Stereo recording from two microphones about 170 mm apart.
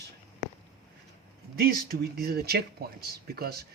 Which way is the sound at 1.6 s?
65° right (ahead or behind).